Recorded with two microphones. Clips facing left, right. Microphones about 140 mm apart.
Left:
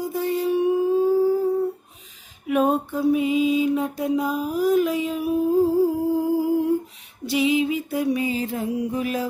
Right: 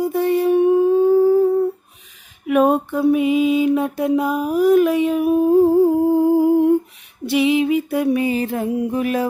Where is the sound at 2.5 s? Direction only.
65° right (ahead or behind).